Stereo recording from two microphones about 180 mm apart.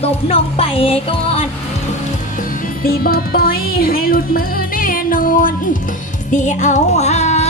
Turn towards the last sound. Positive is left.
turn(degrees=40)  # may be behind; listen again after turning